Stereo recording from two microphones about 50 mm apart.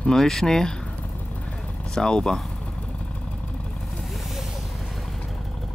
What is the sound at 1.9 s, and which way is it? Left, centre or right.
Speech, centre.